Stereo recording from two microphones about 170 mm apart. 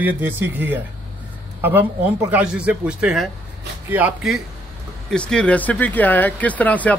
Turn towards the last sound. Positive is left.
turn(degrees=10)  # may be behind; listen again after turning